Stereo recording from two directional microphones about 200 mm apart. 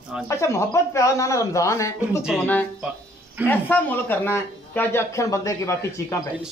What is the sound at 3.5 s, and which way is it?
Speech, 10° left (ahead or behind).